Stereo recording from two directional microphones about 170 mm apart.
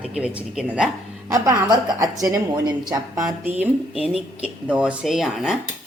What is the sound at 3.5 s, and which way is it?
Speech, 10° right (ahead or behind).